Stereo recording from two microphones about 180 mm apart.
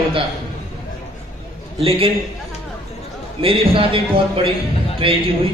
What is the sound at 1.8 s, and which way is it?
Speech, 30° right (ahead or behind).